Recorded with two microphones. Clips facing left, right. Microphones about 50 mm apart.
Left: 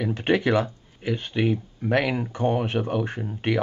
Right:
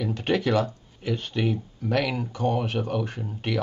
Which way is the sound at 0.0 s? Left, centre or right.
Left.